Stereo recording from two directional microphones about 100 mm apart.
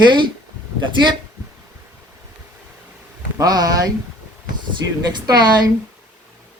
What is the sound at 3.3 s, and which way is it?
Speech, 40° right (ahead or behind).